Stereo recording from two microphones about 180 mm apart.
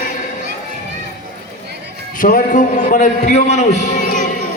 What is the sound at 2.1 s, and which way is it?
A man's voice, 50° left (ahead or behind).